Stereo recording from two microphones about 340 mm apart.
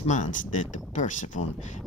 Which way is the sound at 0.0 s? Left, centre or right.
Left.